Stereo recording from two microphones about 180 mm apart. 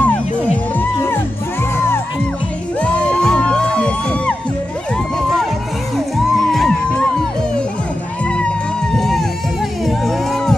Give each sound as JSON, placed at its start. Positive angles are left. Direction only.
{"t": 0.0, "sound": "music", "side_deg": 10}
{"t": 2.8, "sound": "music", "side_deg": 5}
{"t": 6.5, "sound": "music", "side_deg": 5}
{"t": 8.9, "sound": "a sound", "side_deg": 0}
{"t": 9.8, "sound": "music", "side_deg": 0}